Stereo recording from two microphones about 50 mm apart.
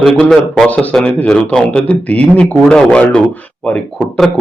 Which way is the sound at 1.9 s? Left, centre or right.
Left.